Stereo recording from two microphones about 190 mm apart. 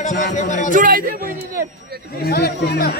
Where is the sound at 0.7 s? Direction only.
45° right (ahead or behind).